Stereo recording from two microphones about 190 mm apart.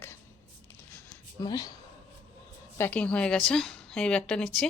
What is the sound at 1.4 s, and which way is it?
Speech, 20° left (ahead or behind).